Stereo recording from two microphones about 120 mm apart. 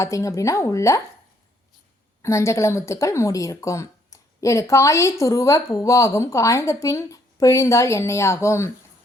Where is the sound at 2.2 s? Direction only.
25° left (ahead or behind).